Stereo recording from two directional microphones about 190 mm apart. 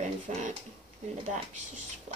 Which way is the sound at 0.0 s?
40° right (ahead or behind).